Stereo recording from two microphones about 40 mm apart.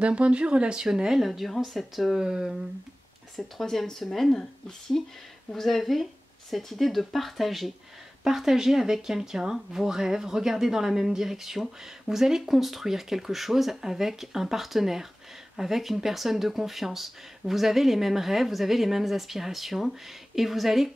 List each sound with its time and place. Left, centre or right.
0.0 s speech: right
0.8 s speech: centre
2.1 s speech: centre
3.6 s speech: centre
4.4 s speech: centre